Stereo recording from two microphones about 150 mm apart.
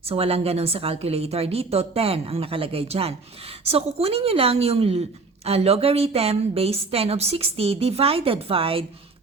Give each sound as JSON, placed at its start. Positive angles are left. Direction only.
{"t": 0.1, "sound": "a woman's voice", "side_deg": -40}